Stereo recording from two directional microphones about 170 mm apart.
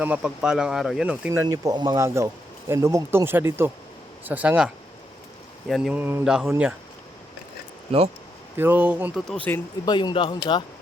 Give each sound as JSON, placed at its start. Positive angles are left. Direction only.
{"t": 0.0, "sound": "speech", "side_deg": -5}
{"t": 8.5, "sound": "speech", "side_deg": -10}
{"t": 9.1, "sound": "speech", "side_deg": 5}
{"t": 9.8, "sound": "speech", "side_deg": 25}